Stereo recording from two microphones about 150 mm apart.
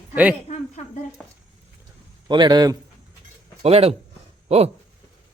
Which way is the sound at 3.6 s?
45° right (ahead or behind).